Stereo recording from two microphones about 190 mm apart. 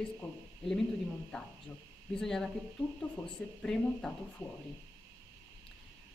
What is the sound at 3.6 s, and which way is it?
Speech, 5° left (ahead or behind).